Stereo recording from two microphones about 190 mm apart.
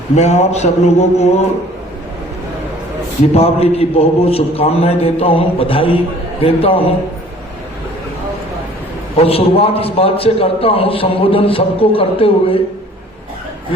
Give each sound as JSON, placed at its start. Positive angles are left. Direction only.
{"t": 0.2, "sound": "a man's voice", "side_deg": 35}
{"t": 3.3, "sound": "a man's voice", "side_deg": 30}
{"t": 9.1, "sound": "a man's voice", "side_deg": 30}